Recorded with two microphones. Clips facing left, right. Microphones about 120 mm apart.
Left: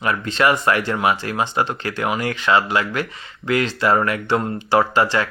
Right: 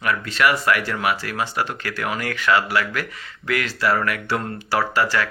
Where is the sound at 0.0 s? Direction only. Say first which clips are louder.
Left 2 dB; 25° left (ahead or behind).